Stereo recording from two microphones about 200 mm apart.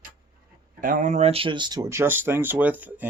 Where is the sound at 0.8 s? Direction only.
40° right (ahead or behind); by 3.0 s 10° right (ahead or behind).